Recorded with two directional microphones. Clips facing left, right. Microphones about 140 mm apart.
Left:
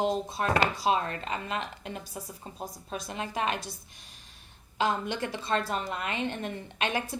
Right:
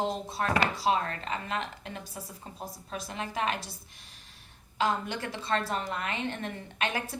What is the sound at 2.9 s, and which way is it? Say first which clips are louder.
Speech: left 1 dB; 20° left (ahead or behind).